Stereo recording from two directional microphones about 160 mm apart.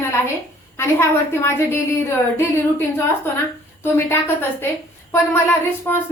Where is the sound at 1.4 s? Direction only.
15° left (ahead or behind).